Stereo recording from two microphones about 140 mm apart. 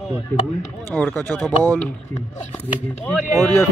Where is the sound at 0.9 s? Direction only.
10° left (ahead or behind).